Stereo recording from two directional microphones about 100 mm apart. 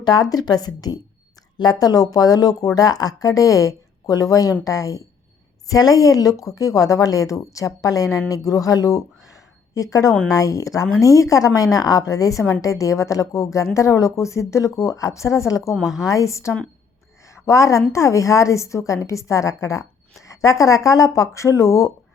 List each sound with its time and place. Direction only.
0.0 s speech: 40° left (ahead or behind)
15.7 s a woman's voice: centre (ahead or behind)
16.0 s speech: 30° left (ahead or behind)